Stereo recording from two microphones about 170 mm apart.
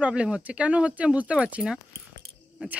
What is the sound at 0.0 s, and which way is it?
Speech, 5° right (ahead or behind).